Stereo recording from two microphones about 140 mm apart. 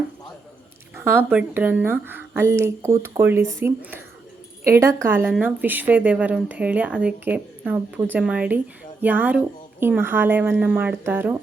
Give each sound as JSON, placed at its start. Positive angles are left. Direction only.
{"t": 0.9, "sound": "speech", "side_deg": -15}
{"t": 4.7, "sound": "speech", "side_deg": -20}